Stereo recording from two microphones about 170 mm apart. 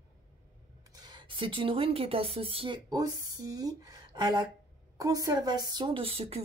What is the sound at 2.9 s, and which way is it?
A woman's voice, 20° right (ahead or behind).